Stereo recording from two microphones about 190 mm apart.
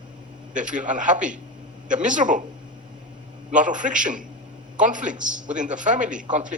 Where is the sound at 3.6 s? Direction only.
40° right (ahead or behind).